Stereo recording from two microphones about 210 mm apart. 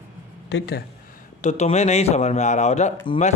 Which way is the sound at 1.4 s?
35° left (ahead or behind).